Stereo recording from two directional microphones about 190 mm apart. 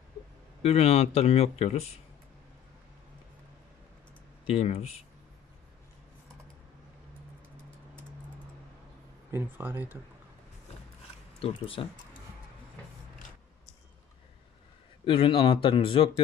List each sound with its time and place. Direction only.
0.6 s speech: 35° left (ahead or behind)
4.5 s speech: 35° left (ahead or behind)
9.3 s speech: 10° right (ahead or behind)
10.7 s gears: 35° left (ahead or behind)
11.3 s speech: 30° left (ahead or behind)
15.0 s speech: 30° left (ahead or behind)